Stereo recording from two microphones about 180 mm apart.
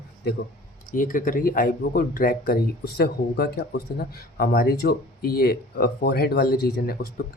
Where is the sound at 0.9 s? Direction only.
50° left (ahead or behind).